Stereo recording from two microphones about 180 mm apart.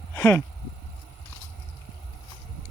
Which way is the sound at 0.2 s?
10° left (ahead or behind).